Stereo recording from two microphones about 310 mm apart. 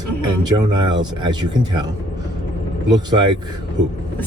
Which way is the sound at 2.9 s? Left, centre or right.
Centre.